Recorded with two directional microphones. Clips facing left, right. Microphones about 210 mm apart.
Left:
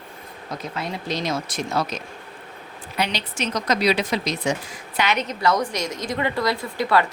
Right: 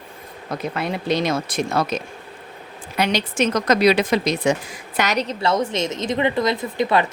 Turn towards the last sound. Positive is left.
turn(degrees=-20)  # may be behind; listen again after turning